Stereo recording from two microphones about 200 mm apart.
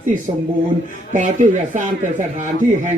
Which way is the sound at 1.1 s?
40° right (ahead or behind).